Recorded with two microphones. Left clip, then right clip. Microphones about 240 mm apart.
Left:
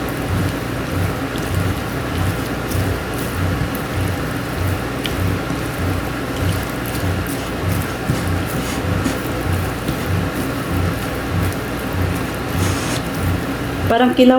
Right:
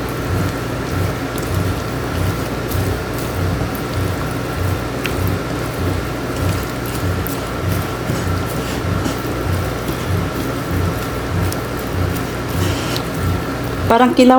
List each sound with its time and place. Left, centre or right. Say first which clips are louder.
13.9 s speech: right 2 dB; right